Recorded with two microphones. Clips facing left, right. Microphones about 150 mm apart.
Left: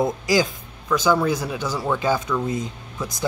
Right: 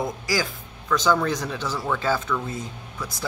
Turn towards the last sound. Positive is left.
turn(degrees=20)  # may be behind; listen again after turning